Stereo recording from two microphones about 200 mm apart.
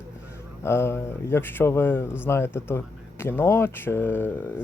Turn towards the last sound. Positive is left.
turn(degrees=10)  # may be behind; listen again after turning